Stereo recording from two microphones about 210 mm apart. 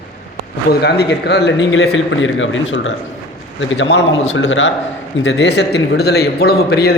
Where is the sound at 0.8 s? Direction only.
50° left (ahead or behind).